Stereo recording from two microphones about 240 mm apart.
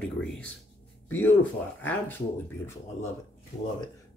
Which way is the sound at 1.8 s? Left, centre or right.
Centre.